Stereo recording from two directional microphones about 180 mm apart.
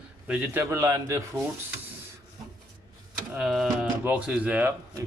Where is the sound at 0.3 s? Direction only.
10° right (ahead or behind).